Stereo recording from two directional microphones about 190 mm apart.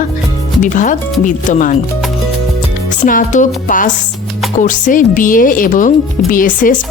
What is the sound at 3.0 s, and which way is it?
Speech, 45° left (ahead or behind).